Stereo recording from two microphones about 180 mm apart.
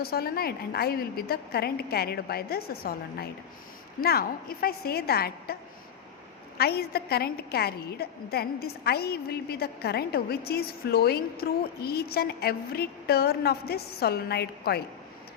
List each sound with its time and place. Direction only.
0.0 s a woman's voice: 60° left (ahead or behind)
6.6 s a woman's voice: 60° left (ahead or behind)